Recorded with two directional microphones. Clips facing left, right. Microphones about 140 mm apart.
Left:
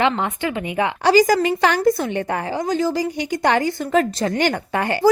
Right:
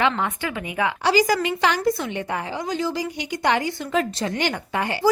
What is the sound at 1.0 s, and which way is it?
A woman's voice, 45° left (ahead or behind).